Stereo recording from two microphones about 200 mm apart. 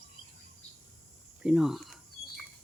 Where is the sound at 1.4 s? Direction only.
Centre (ahead or behind).